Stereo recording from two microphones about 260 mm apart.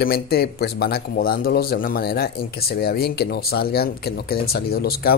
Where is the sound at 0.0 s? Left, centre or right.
Left.